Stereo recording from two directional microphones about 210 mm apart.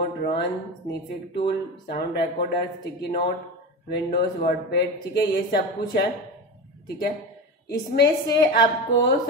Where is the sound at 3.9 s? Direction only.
50° left (ahead or behind).